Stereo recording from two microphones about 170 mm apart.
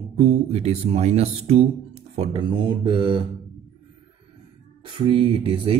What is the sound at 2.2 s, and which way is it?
Speech, 30° right (ahead or behind).